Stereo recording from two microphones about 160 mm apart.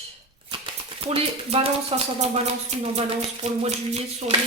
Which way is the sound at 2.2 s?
45° right (ahead or behind).